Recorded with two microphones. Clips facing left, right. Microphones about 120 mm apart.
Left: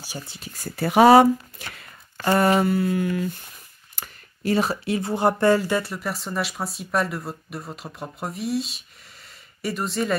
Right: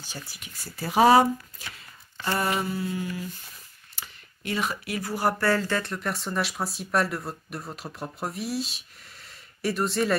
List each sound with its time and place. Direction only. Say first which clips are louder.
0.0 s speech: left 4 dB; 10° left (ahead or behind)
0.5 s speech: left 9 dB; 50° left (ahead or behind); by 1.9 s 70° left (ahead or behind)
2.1 s mantra: left 8 dB; 55° left (ahead or behind)
2.6 s speech: left 8 dB; 60° left (ahead or behind)
3.9 s speech: left 4 dB; 45° left (ahead or behind); by 10.1 s centre (ahead or behind)